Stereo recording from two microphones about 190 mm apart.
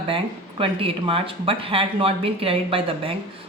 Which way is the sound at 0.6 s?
30° right (ahead or behind).